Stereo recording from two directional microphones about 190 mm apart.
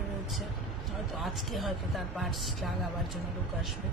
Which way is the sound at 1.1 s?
Centre (ahead or behind).